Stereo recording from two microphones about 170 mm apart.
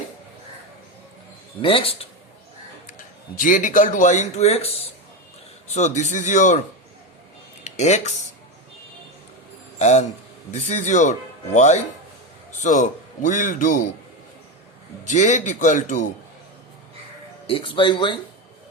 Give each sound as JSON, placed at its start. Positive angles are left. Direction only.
{"t": 1.6, "sound": "speech", "side_deg": 35}
{"t": 3.3, "sound": "speech", "side_deg": 50}
{"t": 7.6, "sound": "speech", "side_deg": 40}
{"t": 9.7, "sound": "speech", "side_deg": 40}
{"t": 15.0, "sound": "speech", "side_deg": 45}
{"t": 17.4, "sound": "speech", "side_deg": 30}